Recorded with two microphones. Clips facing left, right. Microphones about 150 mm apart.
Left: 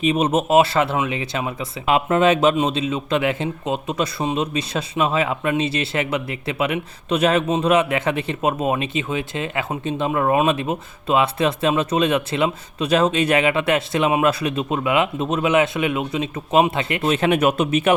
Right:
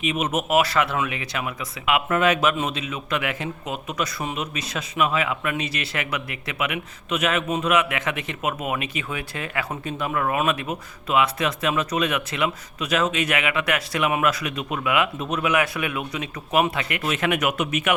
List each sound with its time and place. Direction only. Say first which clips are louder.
0.0 s speech: left 6 dB; 35° left (ahead or behind)